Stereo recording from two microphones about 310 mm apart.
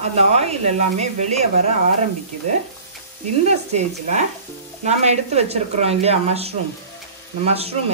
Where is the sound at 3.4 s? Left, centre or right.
Right.